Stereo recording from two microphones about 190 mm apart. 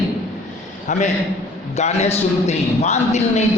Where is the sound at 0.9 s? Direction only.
40° left (ahead or behind).